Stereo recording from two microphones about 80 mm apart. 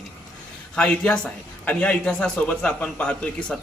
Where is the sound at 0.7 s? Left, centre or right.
Centre.